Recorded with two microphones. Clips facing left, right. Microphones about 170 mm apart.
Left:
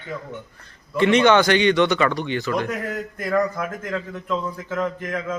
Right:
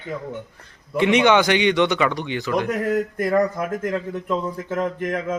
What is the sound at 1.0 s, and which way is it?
Speech, 15° right (ahead or behind).